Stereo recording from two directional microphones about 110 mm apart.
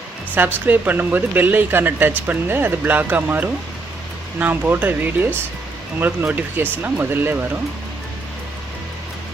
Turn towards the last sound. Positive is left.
turn(degrees=-15)  # may be behind; listen again after turning